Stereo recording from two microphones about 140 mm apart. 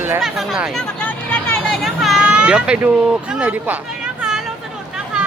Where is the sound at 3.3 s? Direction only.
10° right (ahead or behind).